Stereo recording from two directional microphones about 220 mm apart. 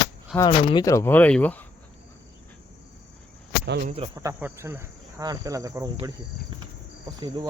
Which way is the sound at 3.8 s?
25° right (ahead or behind).